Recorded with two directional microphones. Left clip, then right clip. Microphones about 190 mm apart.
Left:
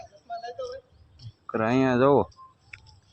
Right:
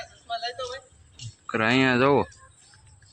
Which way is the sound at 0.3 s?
40° left (ahead or behind).